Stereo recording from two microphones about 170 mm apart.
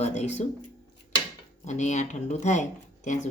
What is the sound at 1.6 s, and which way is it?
Speech, 45° left (ahead or behind).